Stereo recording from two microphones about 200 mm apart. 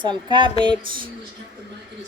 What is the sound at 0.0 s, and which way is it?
Speech, 25° right (ahead or behind).